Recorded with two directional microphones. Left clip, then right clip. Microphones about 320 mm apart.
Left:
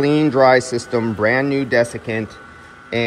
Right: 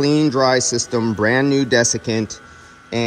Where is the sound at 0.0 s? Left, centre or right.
Centre.